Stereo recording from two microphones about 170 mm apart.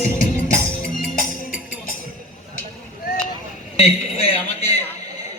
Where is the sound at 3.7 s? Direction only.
35° left (ahead or behind).